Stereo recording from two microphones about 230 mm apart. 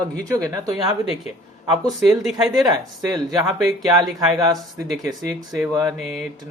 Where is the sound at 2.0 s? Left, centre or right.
Centre.